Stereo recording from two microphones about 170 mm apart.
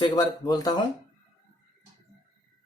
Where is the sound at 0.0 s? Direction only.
25° left (ahead or behind).